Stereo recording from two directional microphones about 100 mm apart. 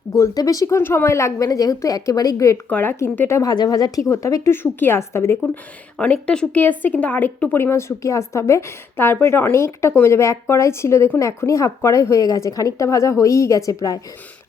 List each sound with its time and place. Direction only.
0.1 s a woman's voice: 35° left (ahead or behind)
2.6 s speech: 15° left (ahead or behind)
2.9 s a woman's voice: 25° left (ahead or behind)
3.5 s a woman's voice: 40° left (ahead or behind)
4.5 s a woman's voice: 20° left (ahead or behind)
6.0 s speech: 10° left (ahead or behind)
7.5 s a woman's voice: 25° left (ahead or behind)